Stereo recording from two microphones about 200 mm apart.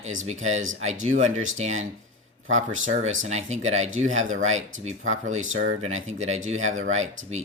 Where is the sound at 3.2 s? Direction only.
35° right (ahead or behind).